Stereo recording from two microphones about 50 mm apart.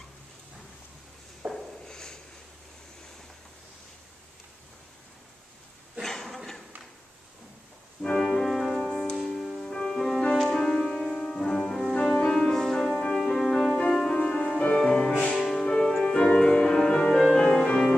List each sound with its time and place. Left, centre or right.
1.5 s a sound: centre
6.0 s a sound: centre
8.0 s organ: centre
8.4 s music: centre
9.2 s music: centre
9.6 s music: centre
15.3 s music: centre
15.6 s music: centre